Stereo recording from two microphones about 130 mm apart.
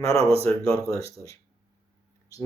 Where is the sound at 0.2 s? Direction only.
50° right (ahead or behind).